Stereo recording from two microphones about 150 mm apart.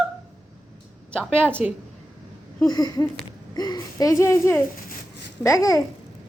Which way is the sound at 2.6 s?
25° left (ahead or behind).